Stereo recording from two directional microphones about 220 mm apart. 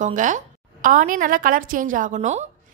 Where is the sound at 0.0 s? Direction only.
35° right (ahead or behind).